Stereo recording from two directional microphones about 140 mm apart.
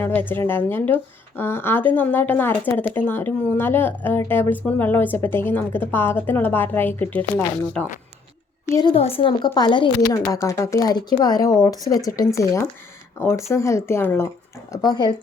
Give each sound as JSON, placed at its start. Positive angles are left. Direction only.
{"t": 0.0, "sound": "speech", "side_deg": 15}
{"t": 9.0, "sound": "speech", "side_deg": 45}
{"t": 10.3, "sound": "speech", "side_deg": 20}
{"t": 14.7, "sound": "speech", "side_deg": 30}